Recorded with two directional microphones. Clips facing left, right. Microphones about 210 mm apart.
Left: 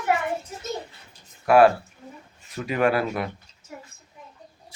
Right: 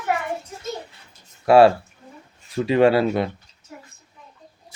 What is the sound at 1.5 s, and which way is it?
Speech, 25° right (ahead or behind).